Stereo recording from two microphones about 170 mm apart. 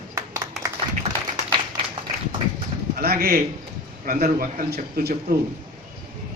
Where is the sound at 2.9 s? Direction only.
65° right (ahead or behind).